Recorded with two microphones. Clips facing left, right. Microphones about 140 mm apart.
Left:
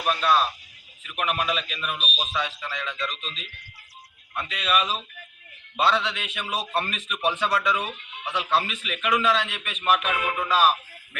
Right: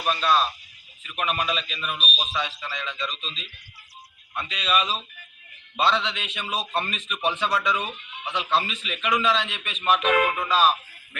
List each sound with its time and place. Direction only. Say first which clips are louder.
0.0 s a man's voice: even; 10° left (ahead or behind)